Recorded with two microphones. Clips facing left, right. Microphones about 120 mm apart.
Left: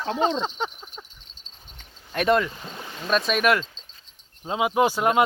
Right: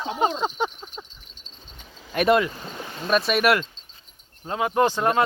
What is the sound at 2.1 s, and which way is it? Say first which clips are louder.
Speech: right 2 dB; 5° right (ahead or behind).